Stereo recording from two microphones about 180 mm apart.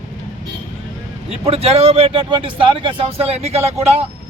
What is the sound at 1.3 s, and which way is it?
Speech, 35° right (ahead or behind).